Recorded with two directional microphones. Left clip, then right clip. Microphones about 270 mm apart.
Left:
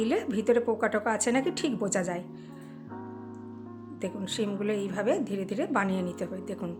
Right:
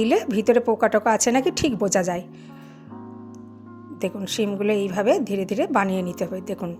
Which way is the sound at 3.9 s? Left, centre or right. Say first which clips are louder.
Right 7 dB; right.